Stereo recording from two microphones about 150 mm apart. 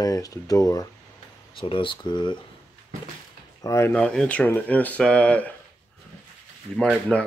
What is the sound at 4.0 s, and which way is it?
Speech, 5° left (ahead or behind).